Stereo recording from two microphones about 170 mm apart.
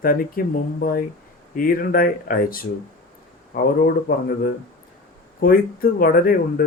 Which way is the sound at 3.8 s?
60° left (ahead or behind).